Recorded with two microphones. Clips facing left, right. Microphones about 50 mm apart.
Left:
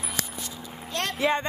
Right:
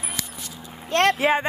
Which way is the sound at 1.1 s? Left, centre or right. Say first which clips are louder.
Right 4 dB; centre.